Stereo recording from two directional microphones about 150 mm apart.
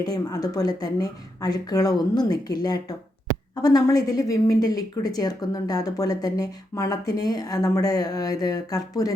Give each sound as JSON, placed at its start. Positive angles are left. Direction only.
{"t": 0.0, "sound": "speech", "side_deg": 25}